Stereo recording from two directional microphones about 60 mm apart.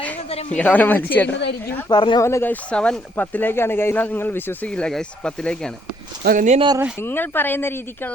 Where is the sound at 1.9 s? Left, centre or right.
Left.